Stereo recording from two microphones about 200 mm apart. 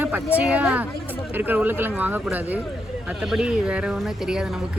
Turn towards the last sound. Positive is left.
turn(degrees=-5)  # may be behind; listen again after turning